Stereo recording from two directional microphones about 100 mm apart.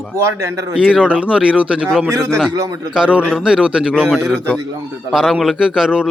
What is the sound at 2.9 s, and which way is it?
Speech, 10° right (ahead or behind).